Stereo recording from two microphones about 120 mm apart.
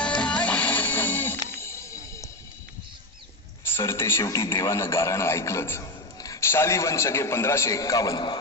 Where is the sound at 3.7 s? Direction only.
20° left (ahead or behind).